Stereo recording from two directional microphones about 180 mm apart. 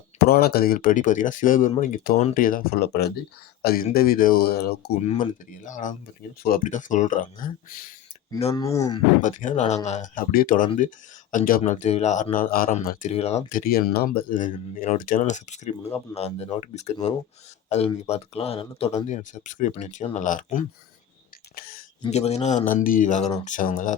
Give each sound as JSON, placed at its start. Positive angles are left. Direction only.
{"t": 0.2, "sound": "speech", "side_deg": 60}
{"t": 4.9, "sound": "speech", "side_deg": 40}
{"t": 8.4, "sound": "speech", "side_deg": 35}
{"t": 8.6, "sound": "speech", "side_deg": 20}
{"t": 9.2, "sound": "speech", "side_deg": 45}
{"t": 13.1, "sound": "speech", "side_deg": 35}
{"t": 21.5, "sound": "a sound", "side_deg": 55}
{"t": 22.1, "sound": "speech", "side_deg": 35}